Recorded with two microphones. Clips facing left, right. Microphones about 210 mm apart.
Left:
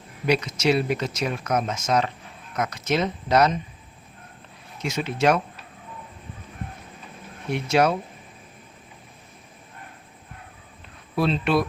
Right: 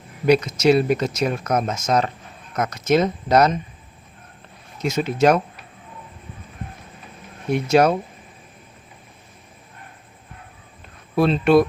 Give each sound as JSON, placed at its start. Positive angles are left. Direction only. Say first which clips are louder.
{"t": 0.3, "sound": "speech", "louder": "right 6 dB", "side_deg": -40}
{"t": 4.8, "sound": "speech", "louder": "right 5 dB", "side_deg": -40}
{"t": 7.5, "sound": "speech", "louder": "right 4 dB", "side_deg": -45}
{"t": 11.2, "sound": "speech", "louder": "right 7 dB", "side_deg": -50}